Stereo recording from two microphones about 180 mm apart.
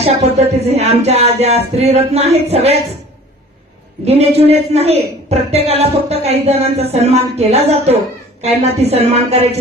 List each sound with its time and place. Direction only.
0.0 s a woman's voice: 35° right (ahead or behind)
4.0 s a woman's voice: 35° right (ahead or behind)